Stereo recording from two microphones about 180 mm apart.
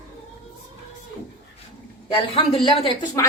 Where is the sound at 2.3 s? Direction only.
30° left (ahead or behind).